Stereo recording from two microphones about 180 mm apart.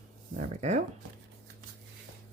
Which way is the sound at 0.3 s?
40° right (ahead or behind).